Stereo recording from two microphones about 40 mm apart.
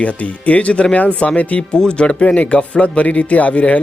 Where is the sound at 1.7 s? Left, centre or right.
Left.